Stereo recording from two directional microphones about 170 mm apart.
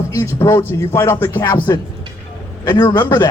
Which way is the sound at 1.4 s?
25° left (ahead or behind).